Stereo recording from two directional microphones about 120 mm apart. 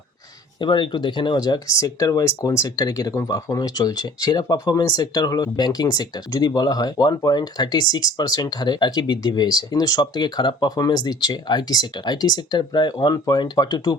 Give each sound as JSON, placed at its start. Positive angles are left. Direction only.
{"t": 0.6, "sound": "speech", "side_deg": 40}